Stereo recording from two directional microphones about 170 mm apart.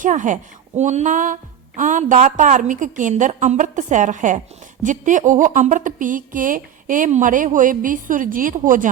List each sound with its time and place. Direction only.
0.0 s a woman's voice: 50° right (ahead or behind)